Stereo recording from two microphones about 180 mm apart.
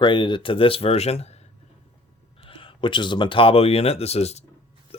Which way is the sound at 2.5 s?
30° left (ahead or behind).